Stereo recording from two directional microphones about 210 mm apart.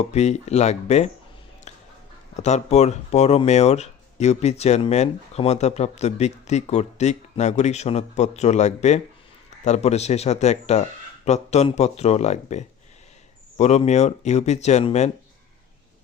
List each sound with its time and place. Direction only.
0.1 s speech: 30° left (ahead or behind)
1.7 s music: 30° left (ahead or behind)
2.3 s speech: 30° left (ahead or behind)